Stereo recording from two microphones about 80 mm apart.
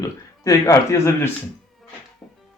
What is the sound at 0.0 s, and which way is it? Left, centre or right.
A man's voice, left.